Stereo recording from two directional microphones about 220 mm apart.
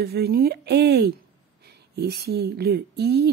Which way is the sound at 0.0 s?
45° right (ahead or behind).